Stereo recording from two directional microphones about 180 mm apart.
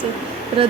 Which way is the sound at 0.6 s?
30° right (ahead or behind).